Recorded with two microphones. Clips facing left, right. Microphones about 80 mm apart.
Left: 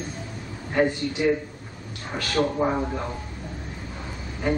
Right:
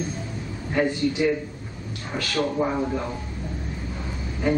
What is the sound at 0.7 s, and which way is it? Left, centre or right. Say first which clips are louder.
Speech: right 1 dB; left.